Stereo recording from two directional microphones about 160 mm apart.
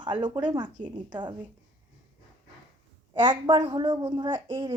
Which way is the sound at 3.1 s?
30° right (ahead or behind).